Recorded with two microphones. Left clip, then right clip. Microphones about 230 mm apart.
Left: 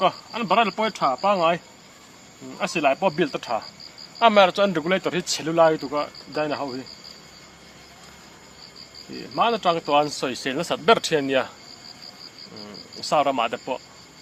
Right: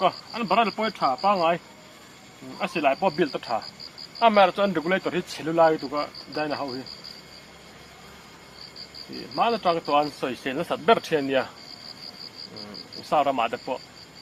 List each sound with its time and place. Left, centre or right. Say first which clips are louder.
0.0 s speech: left 2 dB; left
9.3 s speech: left 2 dB; left
13.1 s speech: left 2 dB; left